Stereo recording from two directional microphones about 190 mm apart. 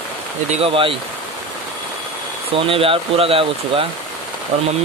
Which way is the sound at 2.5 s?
30° right (ahead or behind).